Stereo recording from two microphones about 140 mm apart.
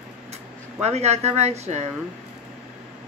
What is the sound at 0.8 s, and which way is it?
Speech, 50° right (ahead or behind).